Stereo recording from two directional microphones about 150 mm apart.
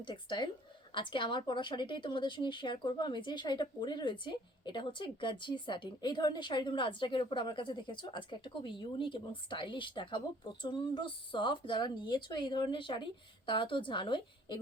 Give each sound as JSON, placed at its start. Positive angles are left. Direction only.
{"t": 0.0, "sound": "a woman's voice", "side_deg": 30}